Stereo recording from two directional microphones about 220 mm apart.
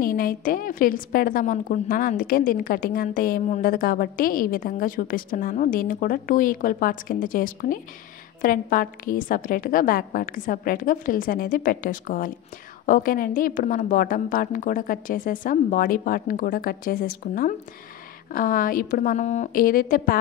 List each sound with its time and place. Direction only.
0.0 s a woman's voice: 40° left (ahead or behind)